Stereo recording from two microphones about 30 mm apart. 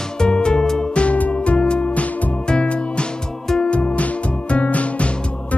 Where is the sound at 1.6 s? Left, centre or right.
Left.